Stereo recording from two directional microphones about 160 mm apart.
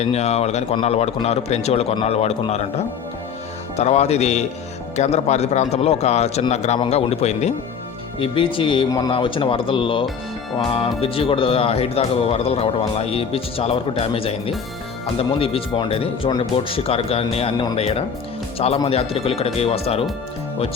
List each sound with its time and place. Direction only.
0.0 s speech: 45° left (ahead or behind)
3.8 s a man's voice: 45° left (ahead or behind)